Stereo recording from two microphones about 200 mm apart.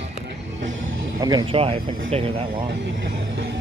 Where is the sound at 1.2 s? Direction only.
25° right (ahead or behind).